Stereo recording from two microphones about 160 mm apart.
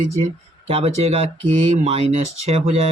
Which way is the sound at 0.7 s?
40° right (ahead or behind).